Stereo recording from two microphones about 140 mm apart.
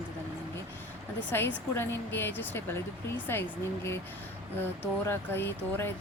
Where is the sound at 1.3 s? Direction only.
15° left (ahead or behind).